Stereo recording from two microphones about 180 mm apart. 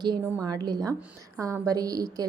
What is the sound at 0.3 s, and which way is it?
A woman's voice, 20° right (ahead or behind).